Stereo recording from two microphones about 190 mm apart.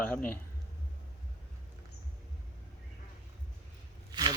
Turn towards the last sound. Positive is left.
turn(degrees=-20)  # may be behind; listen again after turning